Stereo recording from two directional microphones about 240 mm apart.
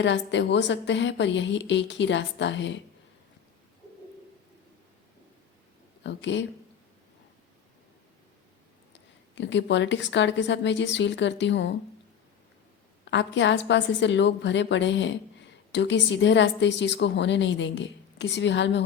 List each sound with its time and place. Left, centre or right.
0.0 s a woman's voice: left
6.0 s speech: left
9.3 s a woman's voice: left
13.1 s a woman's voice: left